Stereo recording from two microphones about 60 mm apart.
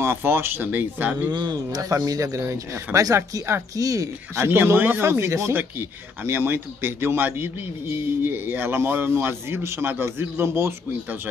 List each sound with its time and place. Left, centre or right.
0.0 s speech: right
1.7 s speech: right
2.4 s speech: right
3.7 s speech: right
4.4 s speech: right
5.5 s speech: right